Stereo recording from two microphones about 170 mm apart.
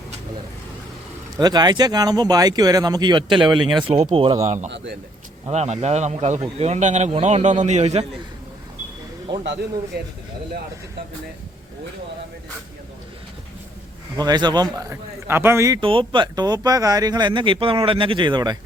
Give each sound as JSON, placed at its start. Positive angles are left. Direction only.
{"t": 1.4, "sound": "a man's voice", "side_deg": -25}
{"t": 4.4, "sound": "a man's voice", "side_deg": -45}
{"t": 9.4, "sound": "speech", "side_deg": -75}
{"t": 14.2, "sound": "speech", "side_deg": -25}
{"t": 15.8, "sound": "speech", "side_deg": -30}